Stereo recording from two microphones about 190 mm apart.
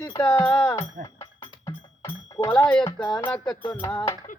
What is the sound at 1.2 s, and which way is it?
Music, 15° left (ahead or behind).